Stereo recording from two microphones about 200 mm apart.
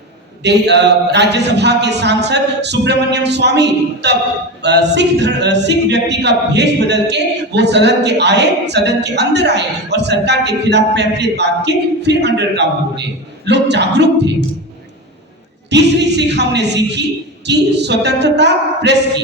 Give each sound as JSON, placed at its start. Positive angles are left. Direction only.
{"t": 0.4, "sound": "a capella", "side_deg": -60}
{"t": 15.7, "sound": "a capella", "side_deg": -60}